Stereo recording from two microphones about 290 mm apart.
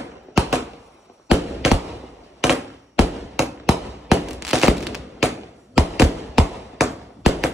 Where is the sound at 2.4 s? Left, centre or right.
Centre.